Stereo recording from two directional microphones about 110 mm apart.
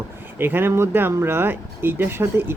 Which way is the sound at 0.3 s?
20° right (ahead or behind).